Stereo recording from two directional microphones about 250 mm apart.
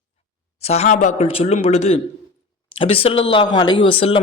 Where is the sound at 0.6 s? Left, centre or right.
Left.